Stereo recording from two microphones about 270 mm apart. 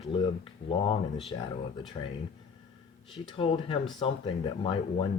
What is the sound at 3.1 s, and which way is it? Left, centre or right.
Speech, centre.